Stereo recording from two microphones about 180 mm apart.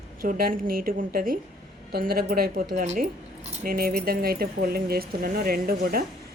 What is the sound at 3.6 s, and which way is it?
Speech, 55° right (ahead or behind).